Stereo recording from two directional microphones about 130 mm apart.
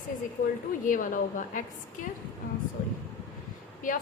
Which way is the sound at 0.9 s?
90° left.